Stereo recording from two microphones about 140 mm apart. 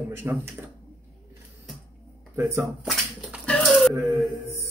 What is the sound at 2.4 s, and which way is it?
Speech, 20° right (ahead or behind).